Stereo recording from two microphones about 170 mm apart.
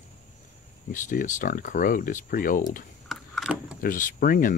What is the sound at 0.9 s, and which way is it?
Speech, 50° left (ahead or behind).